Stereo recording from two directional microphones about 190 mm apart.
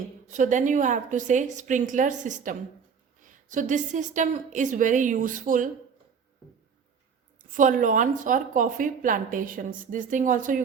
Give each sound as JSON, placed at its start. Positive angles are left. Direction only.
{"t": 0.3, "sound": "a woman's voice", "side_deg": -40}
{"t": 7.5, "sound": "a woman's voice", "side_deg": -45}